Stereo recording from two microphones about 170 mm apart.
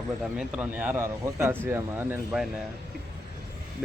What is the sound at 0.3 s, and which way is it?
A man's voice, 5° right (ahead or behind).